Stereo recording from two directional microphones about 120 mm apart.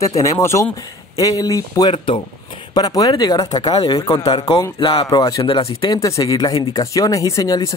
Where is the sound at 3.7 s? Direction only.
50° left (ahead or behind).